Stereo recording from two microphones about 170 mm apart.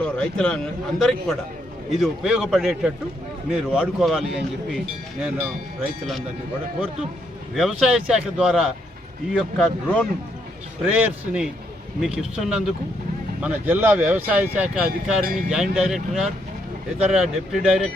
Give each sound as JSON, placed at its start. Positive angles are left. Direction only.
{"t": 0.0, "sound": "a man's voice", "side_deg": 5}
{"t": 7.5, "sound": "a man's voice", "side_deg": 0}
{"t": 14.8, "sound": "speech", "side_deg": -60}
{"t": 15.5, "sound": "a man's voice", "side_deg": 0}